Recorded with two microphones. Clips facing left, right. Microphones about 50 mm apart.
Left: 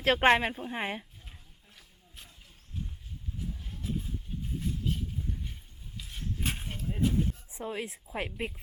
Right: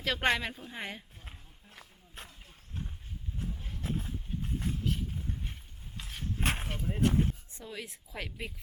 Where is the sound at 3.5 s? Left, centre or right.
Right.